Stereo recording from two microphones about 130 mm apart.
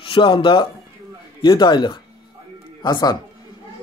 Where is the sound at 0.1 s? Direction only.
40° left (ahead or behind).